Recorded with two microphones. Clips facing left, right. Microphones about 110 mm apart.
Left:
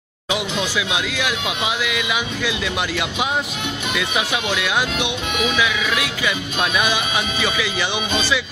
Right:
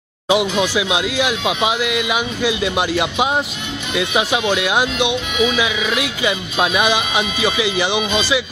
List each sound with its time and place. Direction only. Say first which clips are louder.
0.3 s speech: right 7 dB; 20° right (ahead or behind)
4.6 s speech: right 4 dB; 20° right (ahead or behind)